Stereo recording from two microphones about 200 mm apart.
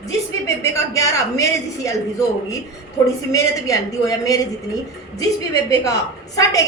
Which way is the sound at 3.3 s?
15° left (ahead or behind).